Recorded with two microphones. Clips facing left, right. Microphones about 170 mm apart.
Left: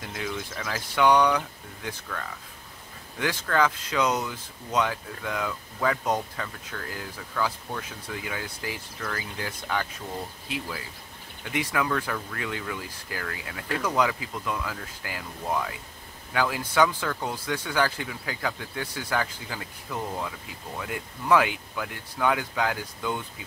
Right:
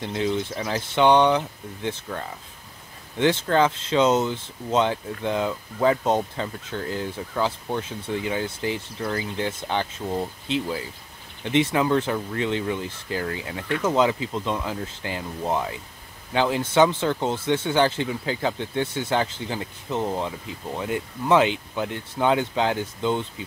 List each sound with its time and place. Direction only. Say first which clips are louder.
0.0 s speech: right 8 dB; 25° right (ahead or behind)